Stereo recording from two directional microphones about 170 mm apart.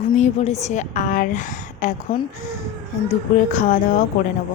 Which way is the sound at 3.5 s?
45° left (ahead or behind).